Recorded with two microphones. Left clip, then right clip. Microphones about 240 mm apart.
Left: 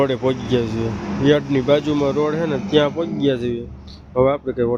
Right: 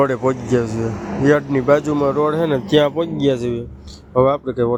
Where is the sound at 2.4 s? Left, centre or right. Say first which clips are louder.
Right 2 dB; right.